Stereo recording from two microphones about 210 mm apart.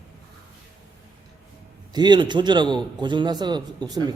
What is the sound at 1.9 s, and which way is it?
A man's voice, 20° right (ahead or behind).